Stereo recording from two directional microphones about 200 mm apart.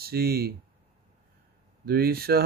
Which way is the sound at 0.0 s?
50° right (ahead or behind).